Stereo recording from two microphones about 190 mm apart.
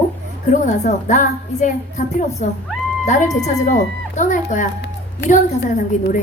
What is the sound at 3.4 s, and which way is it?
A woman's voice, 40° left (ahead or behind).